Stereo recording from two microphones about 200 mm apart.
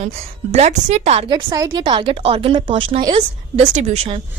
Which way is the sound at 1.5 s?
15° right (ahead or behind).